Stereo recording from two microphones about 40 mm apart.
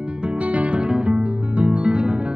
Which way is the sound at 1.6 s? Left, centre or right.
Right.